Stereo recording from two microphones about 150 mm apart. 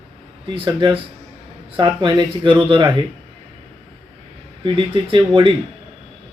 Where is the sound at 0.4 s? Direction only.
35° right (ahead or behind).